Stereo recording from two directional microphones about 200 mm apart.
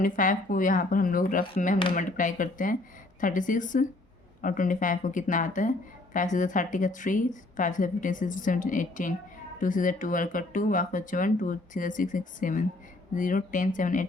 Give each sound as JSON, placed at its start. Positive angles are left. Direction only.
{"t": 0.0, "sound": "speech", "side_deg": 40}